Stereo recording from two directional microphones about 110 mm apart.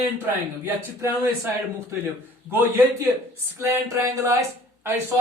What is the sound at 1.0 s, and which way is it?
A man's voice, 30° right (ahead or behind).